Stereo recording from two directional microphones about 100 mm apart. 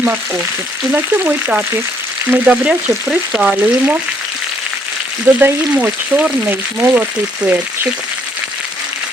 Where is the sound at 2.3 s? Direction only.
15° right (ahead or behind).